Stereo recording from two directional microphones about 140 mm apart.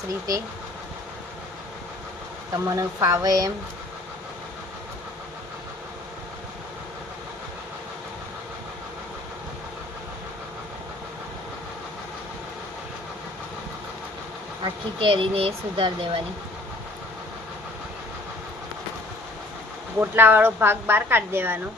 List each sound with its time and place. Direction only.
2.5 s speech: 25° right (ahead or behind)
14.6 s speech: 40° right (ahead or behind)
20.0 s a woman's voice: 15° right (ahead or behind)